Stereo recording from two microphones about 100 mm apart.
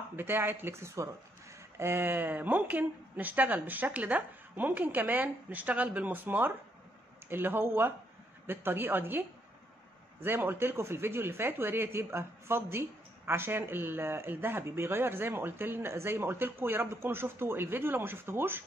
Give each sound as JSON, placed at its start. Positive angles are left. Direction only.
{"t": 0.1, "sound": "speech", "side_deg": -20}
{"t": 10.2, "sound": "speech", "side_deg": -20}